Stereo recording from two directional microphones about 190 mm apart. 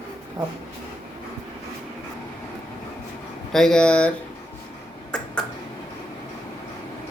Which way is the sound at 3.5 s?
5° left (ahead or behind).